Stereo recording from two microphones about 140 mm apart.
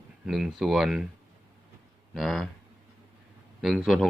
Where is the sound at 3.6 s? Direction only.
Centre (ahead or behind).